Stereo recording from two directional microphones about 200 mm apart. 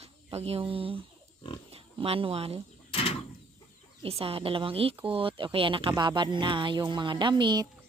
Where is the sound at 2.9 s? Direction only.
30° left (ahead or behind).